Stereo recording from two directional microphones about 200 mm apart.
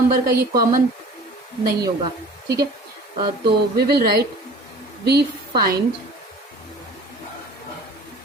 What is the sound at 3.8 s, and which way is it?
Speech, 50° right (ahead or behind).